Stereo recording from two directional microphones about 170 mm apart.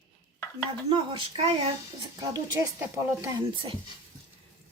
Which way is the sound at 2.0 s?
20° right (ahead or behind).